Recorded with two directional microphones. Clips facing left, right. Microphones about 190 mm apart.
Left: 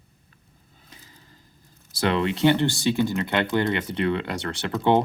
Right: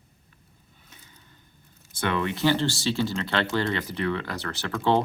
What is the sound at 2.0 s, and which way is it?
Speech, 25° left (ahead or behind).